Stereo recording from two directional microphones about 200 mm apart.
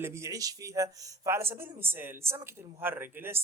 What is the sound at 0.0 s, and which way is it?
Speech, 15° right (ahead or behind).